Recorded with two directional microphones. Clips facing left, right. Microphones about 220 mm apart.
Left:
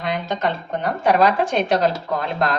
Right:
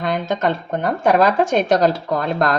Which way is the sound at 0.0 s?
45° right (ahead or behind).